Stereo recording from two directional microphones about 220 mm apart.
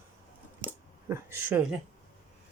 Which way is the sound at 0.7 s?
10° right (ahead or behind).